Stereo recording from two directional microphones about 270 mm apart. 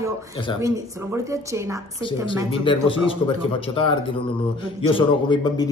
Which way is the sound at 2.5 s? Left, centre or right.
Centre.